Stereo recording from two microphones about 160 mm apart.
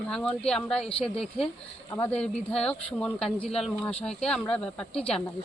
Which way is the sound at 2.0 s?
10° left (ahead or behind).